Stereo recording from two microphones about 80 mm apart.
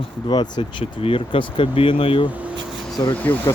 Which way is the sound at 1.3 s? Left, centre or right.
Left.